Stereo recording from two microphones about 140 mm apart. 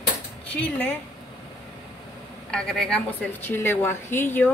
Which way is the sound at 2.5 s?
5° left (ahead or behind).